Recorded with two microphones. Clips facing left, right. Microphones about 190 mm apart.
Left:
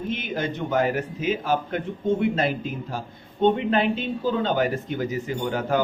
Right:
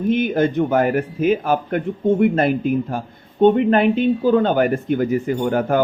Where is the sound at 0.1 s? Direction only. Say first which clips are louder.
Right 12 dB; 50° right (ahead or behind).